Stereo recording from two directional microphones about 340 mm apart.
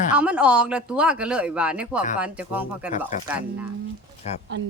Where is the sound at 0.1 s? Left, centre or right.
Centre.